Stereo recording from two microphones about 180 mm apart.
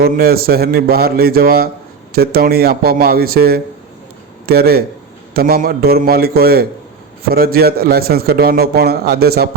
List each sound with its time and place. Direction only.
0.0 s a man's voice: 55° right (ahead or behind)